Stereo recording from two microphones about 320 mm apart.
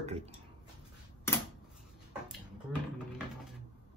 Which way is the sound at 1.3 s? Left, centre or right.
Centre.